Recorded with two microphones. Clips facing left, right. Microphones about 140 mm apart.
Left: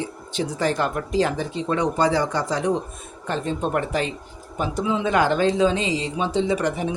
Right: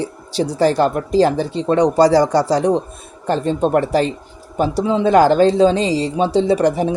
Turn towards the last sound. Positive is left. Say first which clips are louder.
# right 7 dB
turn(degrees=-35)  # may be behind; listen again after turning